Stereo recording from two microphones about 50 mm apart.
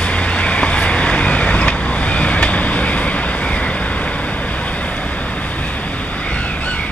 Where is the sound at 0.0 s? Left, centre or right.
Left.